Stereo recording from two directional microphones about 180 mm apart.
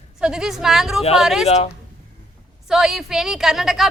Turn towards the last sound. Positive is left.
turn(degrees=0)  # may be behind; listen again after turning